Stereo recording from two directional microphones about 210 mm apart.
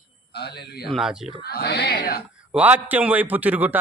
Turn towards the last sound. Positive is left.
turn(degrees=-10)  # may be behind; listen again after turning